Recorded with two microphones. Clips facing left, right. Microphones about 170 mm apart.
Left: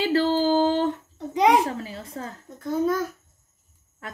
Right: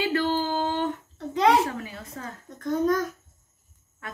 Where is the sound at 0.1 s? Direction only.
30° left (ahead or behind).